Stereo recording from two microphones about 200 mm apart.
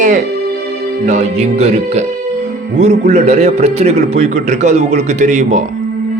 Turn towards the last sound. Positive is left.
turn(degrees=-35)  # may be behind; listen again after turning